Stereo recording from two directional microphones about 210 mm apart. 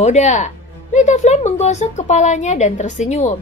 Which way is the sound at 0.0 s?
35° left (ahead or behind).